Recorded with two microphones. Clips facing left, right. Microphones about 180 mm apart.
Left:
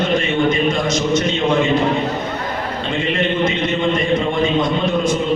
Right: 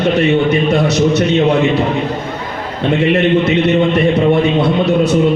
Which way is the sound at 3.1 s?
65° right (ahead or behind).